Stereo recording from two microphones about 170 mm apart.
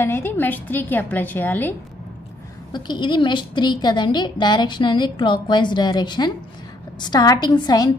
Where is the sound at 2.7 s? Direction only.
25° left (ahead or behind).